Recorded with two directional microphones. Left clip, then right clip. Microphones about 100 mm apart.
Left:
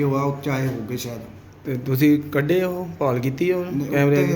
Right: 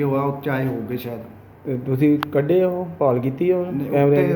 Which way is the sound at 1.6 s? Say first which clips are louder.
Even; 20° right (ahead or behind).